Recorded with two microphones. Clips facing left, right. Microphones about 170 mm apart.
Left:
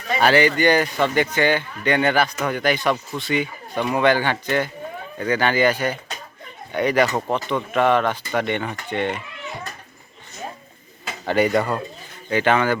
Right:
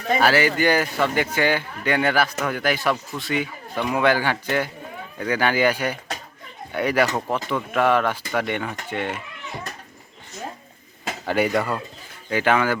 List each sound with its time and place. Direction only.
0.2 s speech: 5° right (ahead or behind)
11.3 s speech: 5° right (ahead or behind)